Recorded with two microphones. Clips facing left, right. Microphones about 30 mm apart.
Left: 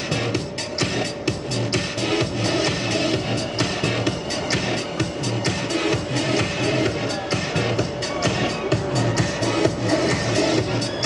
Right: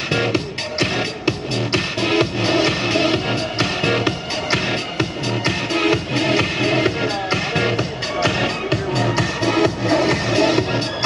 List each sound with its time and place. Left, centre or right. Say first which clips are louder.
0.1 s music: right 6 dB; right